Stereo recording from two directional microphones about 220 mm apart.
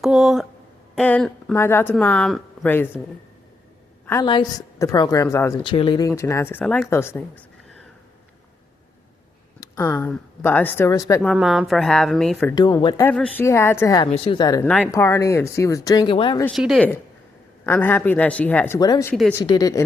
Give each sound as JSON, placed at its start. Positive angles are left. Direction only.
{"t": 0.0, "sound": "speech", "side_deg": 0}
{"t": 4.0, "sound": "speech", "side_deg": 15}
{"t": 9.6, "sound": "speech", "side_deg": 10}
{"t": 12.5, "sound": "a woman's voice", "side_deg": 20}
{"t": 13.1, "sound": "a woman's voice", "side_deg": 5}
{"t": 16.5, "sound": "speech", "side_deg": 0}